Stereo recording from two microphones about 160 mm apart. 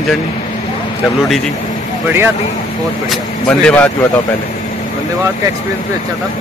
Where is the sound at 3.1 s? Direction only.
5° left (ahead or behind).